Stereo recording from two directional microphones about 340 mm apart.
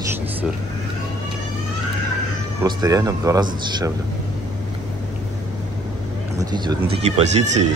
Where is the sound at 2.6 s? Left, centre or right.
Centre.